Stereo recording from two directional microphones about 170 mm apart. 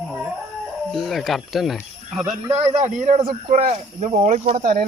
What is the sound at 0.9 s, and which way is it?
Speech, centre (ahead or behind).